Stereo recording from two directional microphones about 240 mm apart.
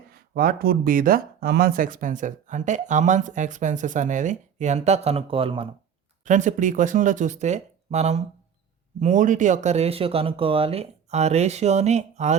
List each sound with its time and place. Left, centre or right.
0.1 s speech: right